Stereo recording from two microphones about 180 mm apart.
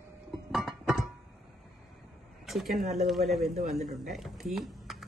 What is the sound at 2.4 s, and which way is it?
Speech, centre (ahead or behind).